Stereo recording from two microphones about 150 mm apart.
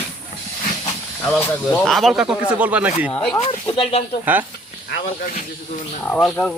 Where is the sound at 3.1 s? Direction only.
10° left (ahead or behind).